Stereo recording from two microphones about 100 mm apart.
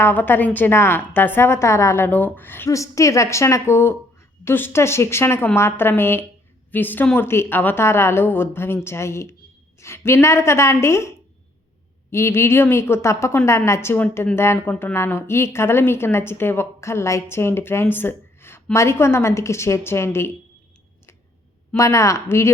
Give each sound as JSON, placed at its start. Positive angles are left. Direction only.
{"t": 0.0, "sound": "a woman's voice", "side_deg": 20}
{"t": 2.6, "sound": "a woman's voice", "side_deg": 30}
{"t": 12.1, "sound": "a woman's voice", "side_deg": 25}
{"t": 21.8, "sound": "a woman's voice", "side_deg": 30}